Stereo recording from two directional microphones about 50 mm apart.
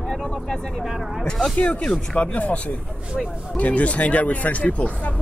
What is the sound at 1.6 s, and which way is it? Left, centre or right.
Speech, left.